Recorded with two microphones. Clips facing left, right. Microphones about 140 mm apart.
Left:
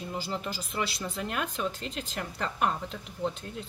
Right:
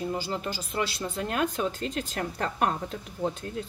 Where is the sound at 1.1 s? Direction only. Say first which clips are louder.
Right 5 dB; 45° right (ahead or behind).